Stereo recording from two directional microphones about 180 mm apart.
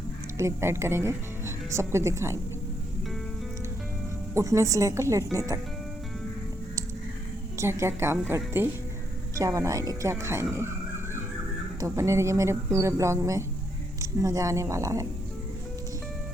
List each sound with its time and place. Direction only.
0.3 s speech: 15° right (ahead or behind)
4.4 s a woman's voice: 15° right (ahead or behind)
7.6 s a woman's voice: 15° right (ahead or behind)
11.8 s a woman's voice: 15° right (ahead or behind)